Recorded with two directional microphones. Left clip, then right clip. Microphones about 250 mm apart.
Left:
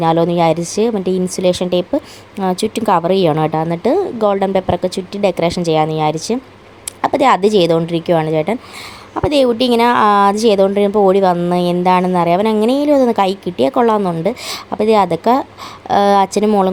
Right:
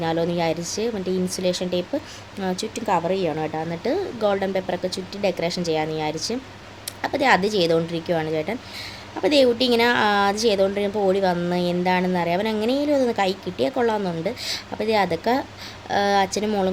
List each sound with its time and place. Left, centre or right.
0.0 s a woman's voice: left